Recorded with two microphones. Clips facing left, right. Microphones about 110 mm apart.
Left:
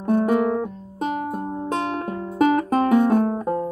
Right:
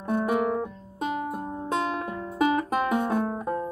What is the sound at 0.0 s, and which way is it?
Music, 45° left (ahead or behind).